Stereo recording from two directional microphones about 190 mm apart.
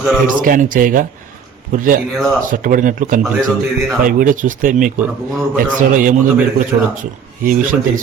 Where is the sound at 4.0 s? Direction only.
45° right (ahead or behind).